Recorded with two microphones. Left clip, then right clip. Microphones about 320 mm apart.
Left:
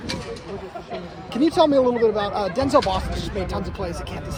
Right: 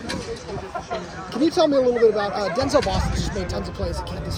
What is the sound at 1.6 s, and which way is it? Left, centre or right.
Speech, left.